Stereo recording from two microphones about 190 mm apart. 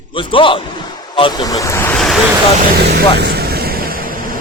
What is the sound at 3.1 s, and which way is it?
Vehicle, 55° right (ahead or behind).